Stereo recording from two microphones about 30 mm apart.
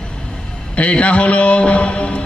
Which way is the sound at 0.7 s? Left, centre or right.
Left.